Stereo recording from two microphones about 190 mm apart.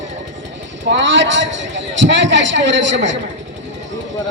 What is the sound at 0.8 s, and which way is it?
A man's voice, 70° right (ahead or behind).